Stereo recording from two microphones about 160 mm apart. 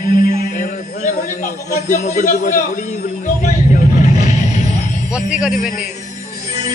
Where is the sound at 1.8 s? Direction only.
50° left (ahead or behind).